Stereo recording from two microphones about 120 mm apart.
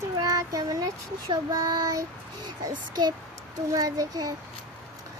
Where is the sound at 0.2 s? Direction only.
30° right (ahead or behind).